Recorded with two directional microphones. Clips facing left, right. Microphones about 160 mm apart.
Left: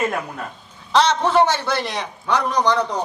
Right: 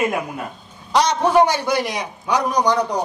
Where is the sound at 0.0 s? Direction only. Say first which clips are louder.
Right 2 dB; 10° right (ahead or behind).